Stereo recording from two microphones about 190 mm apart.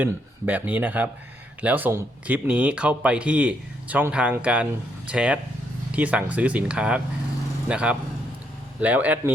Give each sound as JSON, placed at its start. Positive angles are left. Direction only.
{"t": 0.0, "sound": "speech", "side_deg": -10}